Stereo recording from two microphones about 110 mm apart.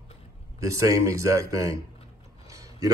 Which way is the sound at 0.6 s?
30° right (ahead or behind).